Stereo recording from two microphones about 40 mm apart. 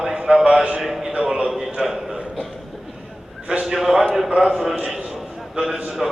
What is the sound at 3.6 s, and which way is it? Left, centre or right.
A man's voice, centre.